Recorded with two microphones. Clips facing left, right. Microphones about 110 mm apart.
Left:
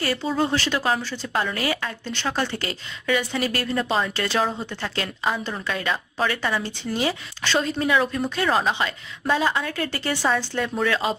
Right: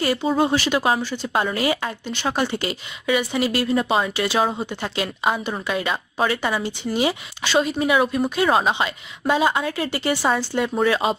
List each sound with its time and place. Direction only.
0.0 s a woman's voice: 20° right (ahead or behind)